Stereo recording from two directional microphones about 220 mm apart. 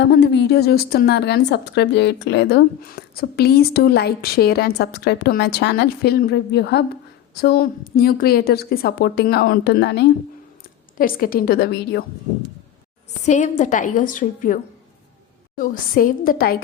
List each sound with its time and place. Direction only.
0.0 s speech: 50° left (ahead or behind)
13.2 s a woman's voice: 35° left (ahead or behind)